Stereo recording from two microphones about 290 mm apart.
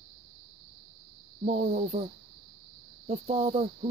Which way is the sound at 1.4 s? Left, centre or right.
Right.